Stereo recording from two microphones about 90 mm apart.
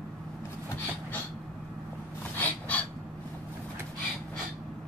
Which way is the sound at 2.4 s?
15° left (ahead or behind).